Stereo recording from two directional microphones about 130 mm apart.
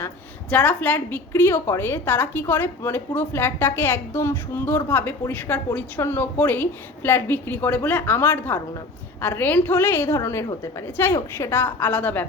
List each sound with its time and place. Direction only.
0.5 s a woman's voice: 10° left (ahead or behind)